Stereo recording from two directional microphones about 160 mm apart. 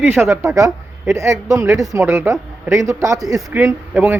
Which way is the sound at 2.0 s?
15° right (ahead or behind).